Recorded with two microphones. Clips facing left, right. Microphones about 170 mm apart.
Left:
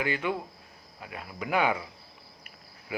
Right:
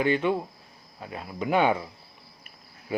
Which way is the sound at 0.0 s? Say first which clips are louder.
Right 6 dB; 25° right (ahead or behind).